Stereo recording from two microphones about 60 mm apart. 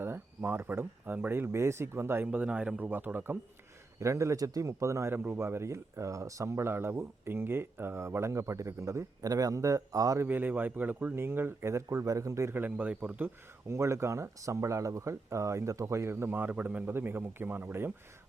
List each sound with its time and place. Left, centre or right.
0.0 s speech: right
1.3 s speech: right
2.2 s speech: right
4.0 s speech: right
5.1 s speech: right
10.2 s speech: right
12.5 s speech: right
13.2 s speech: right
16.3 s speech: right